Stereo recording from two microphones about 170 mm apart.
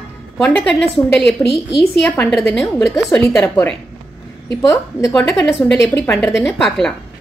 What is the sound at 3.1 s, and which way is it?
A woman's voice, 10° left (ahead or behind).